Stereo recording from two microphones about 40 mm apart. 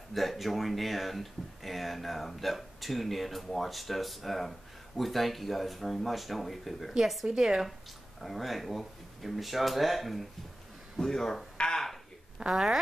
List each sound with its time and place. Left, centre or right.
0.1 s speech: centre
7.2 s a woman's voice: centre
8.2 s speech: centre
11.0 s speech: centre
11.5 s a sound: centre
12.4 s a woman's voice: centre